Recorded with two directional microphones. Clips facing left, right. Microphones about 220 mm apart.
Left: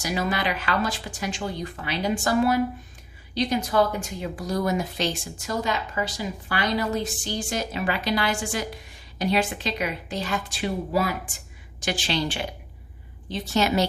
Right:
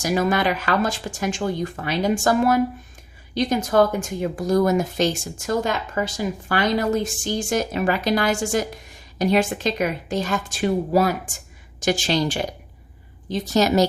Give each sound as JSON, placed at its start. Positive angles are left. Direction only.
{"t": 0.0, "sound": "a woman's voice", "side_deg": -45}